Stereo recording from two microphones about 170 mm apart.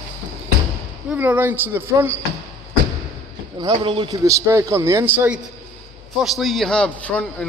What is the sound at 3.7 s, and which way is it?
A man's voice, 30° right (ahead or behind).